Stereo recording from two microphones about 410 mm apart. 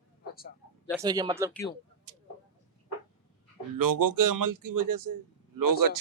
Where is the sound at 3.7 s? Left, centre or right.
Right.